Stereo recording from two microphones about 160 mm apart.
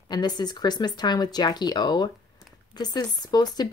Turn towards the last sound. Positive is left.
turn(degrees=25)  # may be behind; listen again after turning